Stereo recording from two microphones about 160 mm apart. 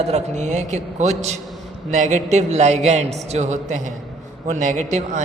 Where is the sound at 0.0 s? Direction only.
45° right (ahead or behind).